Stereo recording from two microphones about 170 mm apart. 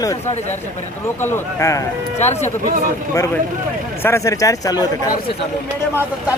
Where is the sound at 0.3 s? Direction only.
40° left (ahead or behind).